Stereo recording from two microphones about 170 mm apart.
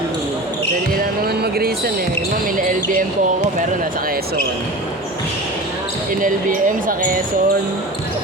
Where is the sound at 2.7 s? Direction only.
50° right (ahead or behind).